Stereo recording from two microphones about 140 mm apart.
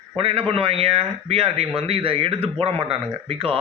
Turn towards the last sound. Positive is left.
turn(degrees=-45)  # may be behind; listen again after turning